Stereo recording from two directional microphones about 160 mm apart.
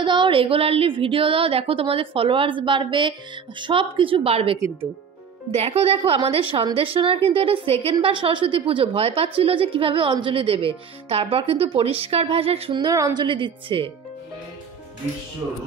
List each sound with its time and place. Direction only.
0.0 s a woman's voice: 30° right (ahead or behind)